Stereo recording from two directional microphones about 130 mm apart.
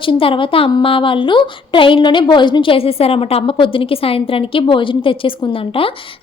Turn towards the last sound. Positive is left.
turn(degrees=45)  # may be behind; listen again after turning